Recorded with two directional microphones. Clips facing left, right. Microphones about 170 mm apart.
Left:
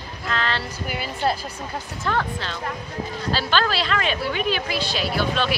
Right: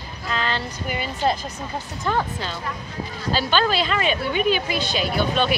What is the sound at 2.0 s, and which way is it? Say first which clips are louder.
A woman's voice: right 1 dB; 10° right (ahead or behind).